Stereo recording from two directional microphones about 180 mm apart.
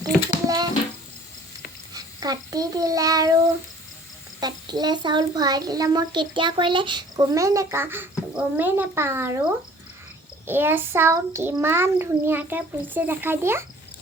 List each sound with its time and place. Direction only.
0.4 s a sound: 20° right (ahead or behind)
1.9 s a child's voice: 20° right (ahead or behind)
4.4 s a child's voice: 20° right (ahead or behind)
10.4 s a child's voice: 10° right (ahead or behind)